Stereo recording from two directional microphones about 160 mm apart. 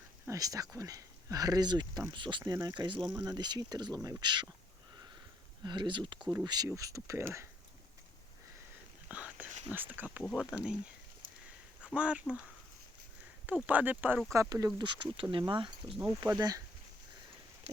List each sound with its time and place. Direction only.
0.3 s speech: 20° right (ahead or behind)
5.6 s speech: 30° right (ahead or behind)
9.0 s whispering: 10° right (ahead or behind)
9.7 s speech: 10° right (ahead or behind)
11.9 s speech: 5° right (ahead or behind)
13.5 s speech: 10° right (ahead or behind); by 16.0 s 30° right (ahead or behind)
16.0 s speech: 20° right (ahead or behind)